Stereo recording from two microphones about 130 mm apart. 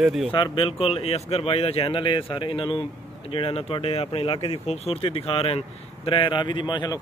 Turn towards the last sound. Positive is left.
turn(degrees=35)  # may be behind; listen again after turning